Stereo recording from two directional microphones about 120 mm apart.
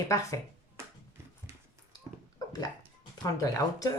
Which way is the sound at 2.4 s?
30° left (ahead or behind).